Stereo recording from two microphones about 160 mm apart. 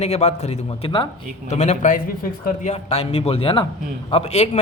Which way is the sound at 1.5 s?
45° left (ahead or behind).